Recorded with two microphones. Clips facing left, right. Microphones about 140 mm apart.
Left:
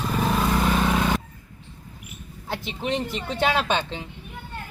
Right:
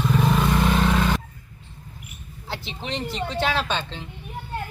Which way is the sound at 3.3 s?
55° left (ahead or behind).